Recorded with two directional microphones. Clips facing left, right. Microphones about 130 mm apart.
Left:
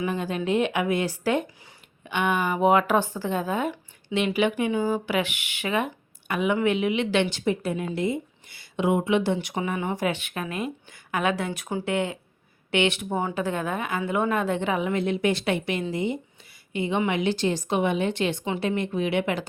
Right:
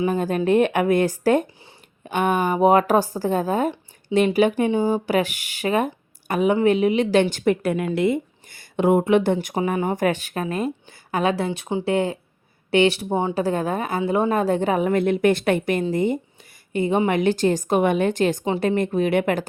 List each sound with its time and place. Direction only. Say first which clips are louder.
0.0 s a woman's voice: right 6 dB; 40° right (ahead or behind); by 8.2 s 70° right (ahead or behind)
8.4 s a woman's voice: right 5 dB; 50° right (ahead or behind)